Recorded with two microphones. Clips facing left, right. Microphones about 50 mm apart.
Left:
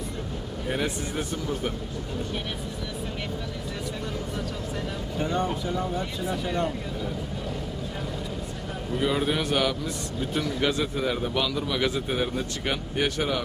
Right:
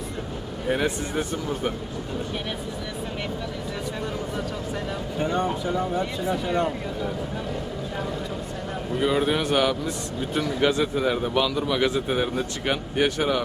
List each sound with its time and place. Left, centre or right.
0.7 s a man's voice: centre
5.1 s a man's voice: centre
9.0 s a man's voice: centre